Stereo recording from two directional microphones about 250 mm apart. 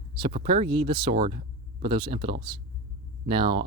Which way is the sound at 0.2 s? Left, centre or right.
Right.